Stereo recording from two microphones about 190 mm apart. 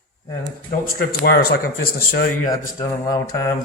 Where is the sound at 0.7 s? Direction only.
50° left (ahead or behind).